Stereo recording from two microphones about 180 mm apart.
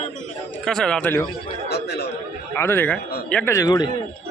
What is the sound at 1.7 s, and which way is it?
Speech, 65° left (ahead or behind).